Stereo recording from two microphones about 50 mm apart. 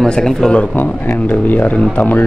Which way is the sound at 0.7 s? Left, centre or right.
Left.